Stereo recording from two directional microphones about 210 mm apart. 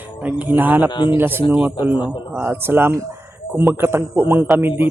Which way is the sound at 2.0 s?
25° left (ahead or behind).